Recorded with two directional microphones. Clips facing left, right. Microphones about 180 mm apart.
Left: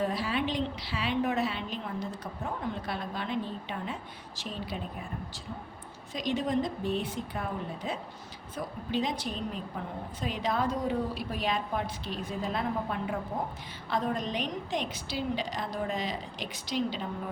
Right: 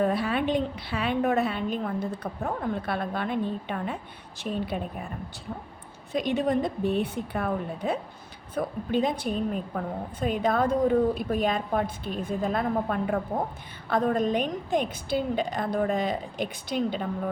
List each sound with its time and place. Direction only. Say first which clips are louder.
0.0 s a woman's voice: right 5 dB; 55° right (ahead or behind)
6.1 s a woman's voice: right 4 dB; 60° right (ahead or behind)